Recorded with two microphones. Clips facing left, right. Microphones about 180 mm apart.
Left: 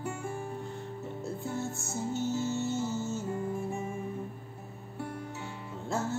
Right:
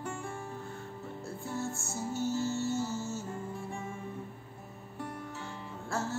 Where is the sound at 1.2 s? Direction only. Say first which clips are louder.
Left 1 dB; 20° left (ahead or behind).